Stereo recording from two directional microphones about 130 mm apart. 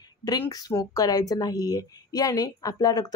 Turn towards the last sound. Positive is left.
turn(degrees=30)  # may be behind; listen again after turning